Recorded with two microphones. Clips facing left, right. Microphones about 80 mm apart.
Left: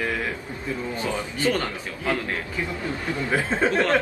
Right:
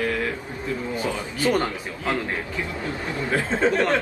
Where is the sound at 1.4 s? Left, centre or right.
Right.